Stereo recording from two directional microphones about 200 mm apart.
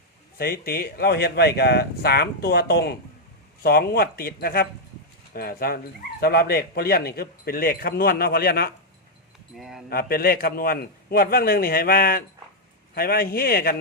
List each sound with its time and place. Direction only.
0.3 s speech: 50° left (ahead or behind)
9.6 s speech: centre (ahead or behind)
9.9 s speech: 50° left (ahead or behind)